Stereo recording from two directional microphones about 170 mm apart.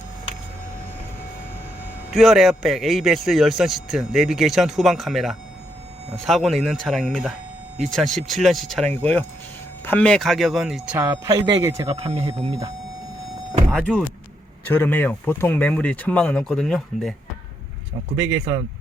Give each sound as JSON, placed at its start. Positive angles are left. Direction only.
{"t": 2.1, "sound": "speech", "side_deg": 0}
{"t": 11.9, "sound": "speech", "side_deg": -35}
{"t": 13.7, "sound": "speech", "side_deg": 5}
{"t": 18.2, "sound": "speech", "side_deg": -20}